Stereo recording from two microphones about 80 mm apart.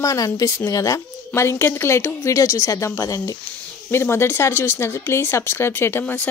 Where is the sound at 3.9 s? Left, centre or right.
Left.